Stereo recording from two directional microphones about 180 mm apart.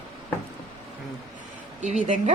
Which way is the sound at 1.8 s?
40° right (ahead or behind).